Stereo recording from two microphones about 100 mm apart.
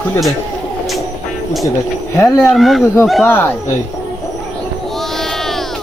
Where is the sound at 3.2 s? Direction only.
20° left (ahead or behind).